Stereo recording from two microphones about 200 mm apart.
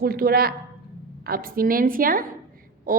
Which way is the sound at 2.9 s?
45° right (ahead or behind).